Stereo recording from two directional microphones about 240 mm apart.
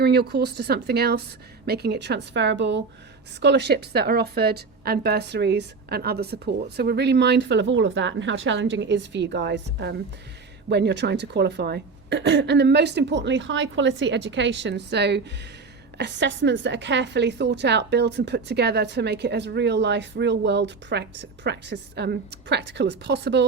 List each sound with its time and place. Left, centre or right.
0.0 s a woman's voice: right